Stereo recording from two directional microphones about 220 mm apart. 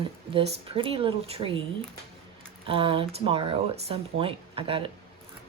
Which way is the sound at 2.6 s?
25° right (ahead or behind).